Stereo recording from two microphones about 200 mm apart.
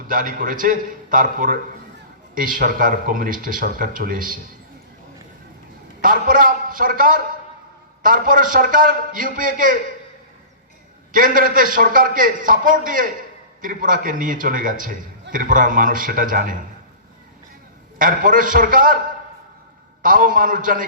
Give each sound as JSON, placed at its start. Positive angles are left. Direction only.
{"t": 0.1, "sound": "speech", "side_deg": -45}
{"t": 6.0, "sound": "a man's voice", "side_deg": -45}
{"t": 11.1, "sound": "a man's voice", "side_deg": -40}
{"t": 18.0, "sound": "speech", "side_deg": -40}
{"t": 20.0, "sound": "speech", "side_deg": -40}